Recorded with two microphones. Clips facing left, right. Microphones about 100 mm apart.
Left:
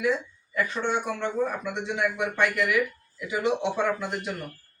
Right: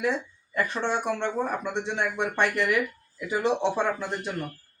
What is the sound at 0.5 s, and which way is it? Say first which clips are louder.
Speech: even; 35° right (ahead or behind).